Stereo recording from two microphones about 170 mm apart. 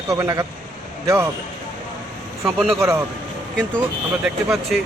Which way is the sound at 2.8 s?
15° right (ahead or behind).